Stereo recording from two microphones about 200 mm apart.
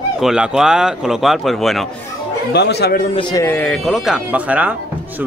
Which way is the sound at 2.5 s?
55° left (ahead or behind).